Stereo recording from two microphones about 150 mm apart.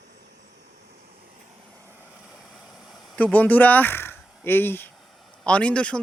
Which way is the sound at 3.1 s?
10° left (ahead or behind).